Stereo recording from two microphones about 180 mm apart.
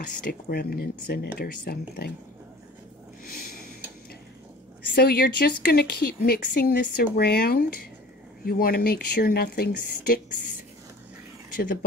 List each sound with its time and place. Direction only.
0.0 s speech: 55° left (ahead or behind)
4.9 s speech: 60° left (ahead or behind)